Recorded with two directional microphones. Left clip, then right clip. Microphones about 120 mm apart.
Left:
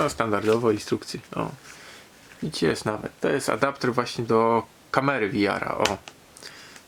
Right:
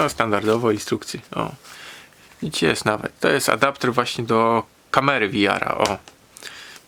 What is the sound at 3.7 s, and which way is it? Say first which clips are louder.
Speech: right 4 dB; 80° right.